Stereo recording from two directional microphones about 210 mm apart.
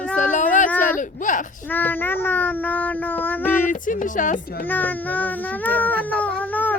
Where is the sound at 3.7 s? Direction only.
40° left (ahead or behind).